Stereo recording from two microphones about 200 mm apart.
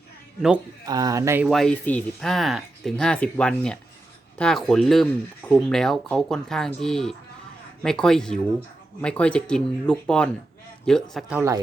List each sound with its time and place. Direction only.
0.9 s speech: 20° right (ahead or behind)
1.5 s speech: centre (ahead or behind)